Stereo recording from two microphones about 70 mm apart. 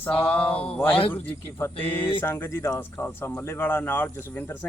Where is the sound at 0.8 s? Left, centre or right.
Left.